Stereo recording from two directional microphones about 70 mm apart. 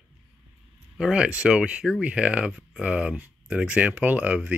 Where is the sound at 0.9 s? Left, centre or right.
Centre.